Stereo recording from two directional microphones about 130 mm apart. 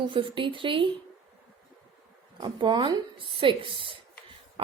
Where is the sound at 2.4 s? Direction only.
40° right (ahead or behind).